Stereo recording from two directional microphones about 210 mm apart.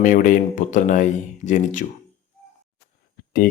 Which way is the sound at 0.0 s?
40° left (ahead or behind).